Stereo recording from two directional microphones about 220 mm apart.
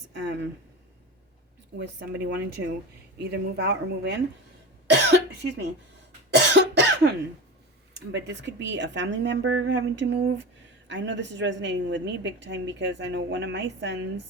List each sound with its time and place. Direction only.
0.2 s speech: 50° right (ahead or behind)
1.7 s a woman's voice: 50° right (ahead or behind)
6.3 s cough: 50° right (ahead or behind)
8.1 s a woman's voice: 55° right (ahead or behind)